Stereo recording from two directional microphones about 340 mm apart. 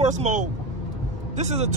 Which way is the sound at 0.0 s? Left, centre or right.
Right.